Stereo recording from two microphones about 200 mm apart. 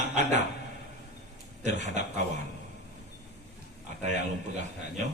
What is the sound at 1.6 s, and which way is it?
Speech, 35° right (ahead or behind).